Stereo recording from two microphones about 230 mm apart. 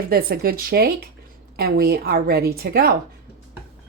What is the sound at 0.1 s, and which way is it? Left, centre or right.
A woman's voice, right.